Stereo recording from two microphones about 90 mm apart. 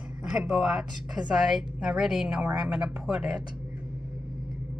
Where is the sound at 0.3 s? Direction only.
5° right (ahead or behind).